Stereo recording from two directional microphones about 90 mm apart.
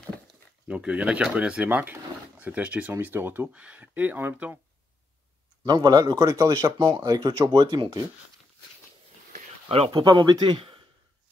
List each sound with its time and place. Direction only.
0.7 s speech: 15° right (ahead or behind)
5.7 s speech: 45° right (ahead or behind)
6.8 s speech: 55° right (ahead or behind)
9.7 s speech: 80° right